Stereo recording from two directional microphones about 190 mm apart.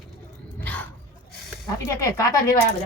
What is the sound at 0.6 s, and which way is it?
Dog, 10° left (ahead or behind).